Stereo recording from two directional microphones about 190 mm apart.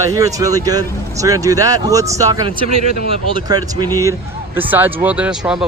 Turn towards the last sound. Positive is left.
turn(degrees=-5)  # may be behind; listen again after turning